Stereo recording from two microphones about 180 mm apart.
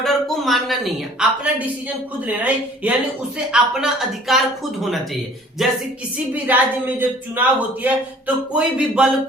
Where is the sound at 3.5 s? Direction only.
5° right (ahead or behind).